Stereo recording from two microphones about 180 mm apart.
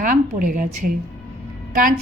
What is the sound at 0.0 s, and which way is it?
A woman's voice, 50° right (ahead or behind).